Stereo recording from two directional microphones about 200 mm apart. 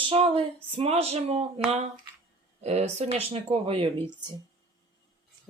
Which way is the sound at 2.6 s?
35° right (ahead or behind).